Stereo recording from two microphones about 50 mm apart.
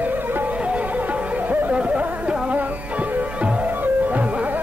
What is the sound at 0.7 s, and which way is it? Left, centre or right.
Music, right.